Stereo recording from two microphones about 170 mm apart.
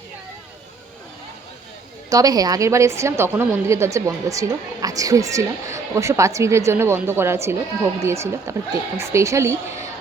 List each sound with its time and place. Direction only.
2.0 s a woman's voice: 20° right (ahead or behind)